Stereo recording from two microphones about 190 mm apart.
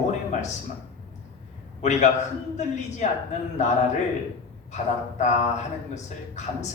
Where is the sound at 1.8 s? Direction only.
40° left (ahead or behind).